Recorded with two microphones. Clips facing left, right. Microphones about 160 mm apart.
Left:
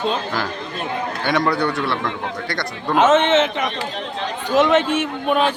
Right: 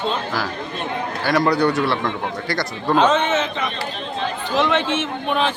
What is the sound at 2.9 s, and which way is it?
Speech, 20° left (ahead or behind).